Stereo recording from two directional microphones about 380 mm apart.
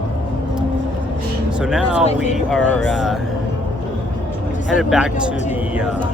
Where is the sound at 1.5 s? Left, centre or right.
Centre.